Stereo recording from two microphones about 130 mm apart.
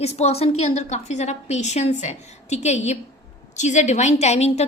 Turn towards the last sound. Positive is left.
turn(degrees=55)  # may be behind; listen again after turning